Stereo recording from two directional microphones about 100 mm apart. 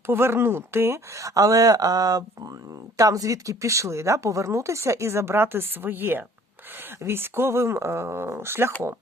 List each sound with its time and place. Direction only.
0.1 s speech: 25° right (ahead or behind)